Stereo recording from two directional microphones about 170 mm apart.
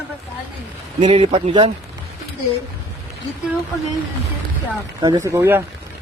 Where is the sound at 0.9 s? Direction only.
40° right (ahead or behind).